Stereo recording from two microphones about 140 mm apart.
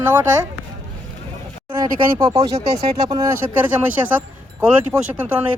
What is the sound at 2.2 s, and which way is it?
Speech, 40° right (ahead or behind).